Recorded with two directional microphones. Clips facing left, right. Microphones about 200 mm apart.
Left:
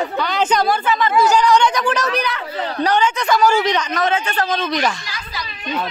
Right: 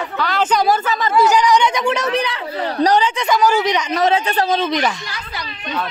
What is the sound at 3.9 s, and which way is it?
Speech, 35° right (ahead or behind).